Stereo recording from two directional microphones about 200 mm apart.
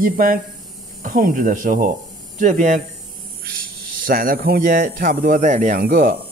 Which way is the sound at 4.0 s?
45° right (ahead or behind).